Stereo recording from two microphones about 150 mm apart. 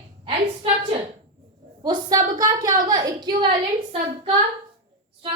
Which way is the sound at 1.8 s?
25° right (ahead or behind).